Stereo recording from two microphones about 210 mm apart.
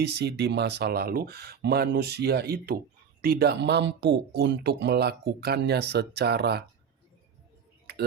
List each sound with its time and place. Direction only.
0.0 s speech: 50° right (ahead or behind)